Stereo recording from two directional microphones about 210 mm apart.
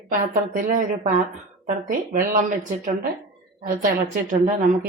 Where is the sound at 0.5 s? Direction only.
35° right (ahead or behind).